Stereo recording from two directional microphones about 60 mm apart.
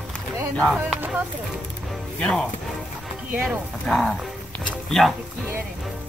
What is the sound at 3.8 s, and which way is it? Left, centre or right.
Speech, centre.